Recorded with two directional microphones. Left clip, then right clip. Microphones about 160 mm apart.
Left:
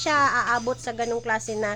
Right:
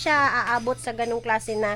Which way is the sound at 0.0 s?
15° right (ahead or behind).